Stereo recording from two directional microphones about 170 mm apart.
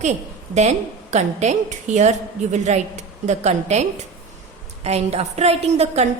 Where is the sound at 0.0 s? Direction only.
40° right (ahead or behind).